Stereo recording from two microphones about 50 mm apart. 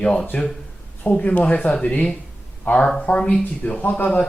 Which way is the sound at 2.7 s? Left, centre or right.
Left.